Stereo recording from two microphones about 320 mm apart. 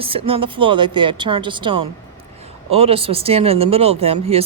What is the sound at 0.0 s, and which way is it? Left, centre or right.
Speech, centre.